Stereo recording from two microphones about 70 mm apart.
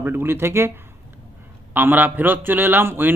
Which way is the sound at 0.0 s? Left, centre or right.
Right.